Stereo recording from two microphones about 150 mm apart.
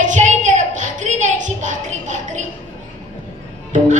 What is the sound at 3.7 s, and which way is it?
Music, 55° right (ahead or behind).